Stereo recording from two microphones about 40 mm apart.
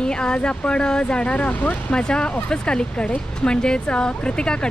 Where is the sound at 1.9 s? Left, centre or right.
Left.